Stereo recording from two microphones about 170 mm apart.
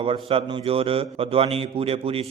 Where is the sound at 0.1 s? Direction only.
35° right (ahead or behind).